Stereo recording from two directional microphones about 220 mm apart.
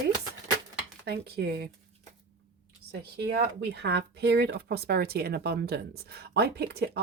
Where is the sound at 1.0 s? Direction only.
45° right (ahead or behind).